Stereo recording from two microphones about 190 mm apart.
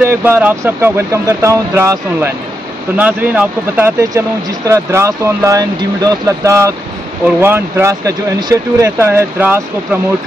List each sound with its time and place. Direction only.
0.0 s speech: 10° right (ahead or behind)